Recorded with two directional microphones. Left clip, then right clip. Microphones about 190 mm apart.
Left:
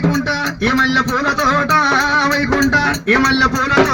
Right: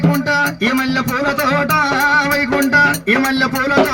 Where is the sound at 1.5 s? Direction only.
55° right (ahead or behind).